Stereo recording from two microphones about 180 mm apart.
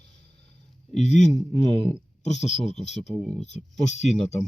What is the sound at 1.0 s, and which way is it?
Speech, 40° left (ahead or behind).